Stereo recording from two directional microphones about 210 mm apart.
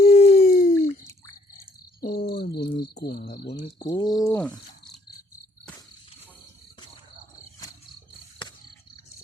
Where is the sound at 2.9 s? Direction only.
50° left (ahead or behind).